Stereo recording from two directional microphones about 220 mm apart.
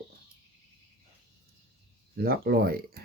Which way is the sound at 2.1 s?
45° right (ahead or behind).